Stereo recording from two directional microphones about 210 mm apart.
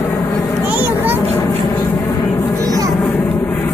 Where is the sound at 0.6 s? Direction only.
10° right (ahead or behind).